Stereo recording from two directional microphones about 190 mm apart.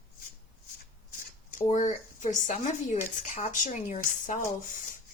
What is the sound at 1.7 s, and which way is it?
Speech, 40° left (ahead or behind).